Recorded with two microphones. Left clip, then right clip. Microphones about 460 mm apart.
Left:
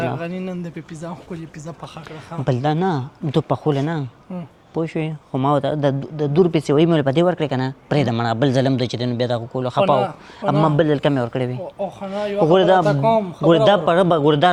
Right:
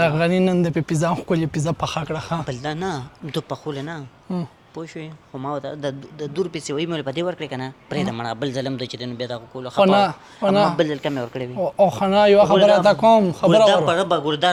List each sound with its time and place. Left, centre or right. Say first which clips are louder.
0.0 s speech: right 7 dB; right
2.5 s speech: left 6 dB; left
3.5 s speech: left 8 dB; left
9.9 s speech: right 1 dB; right
10.8 s speech: left 4 dB; left
11.6 s speech: right 10 dB; right
12.5 s speech: even; left
12.8 s speech: right 3 dB; right
13.7 s a man's voice: left 2 dB; left